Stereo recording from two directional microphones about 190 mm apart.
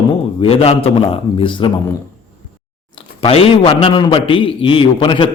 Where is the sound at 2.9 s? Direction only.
30° left (ahead or behind).